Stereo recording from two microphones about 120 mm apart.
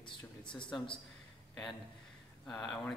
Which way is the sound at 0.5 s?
10° left (ahead or behind).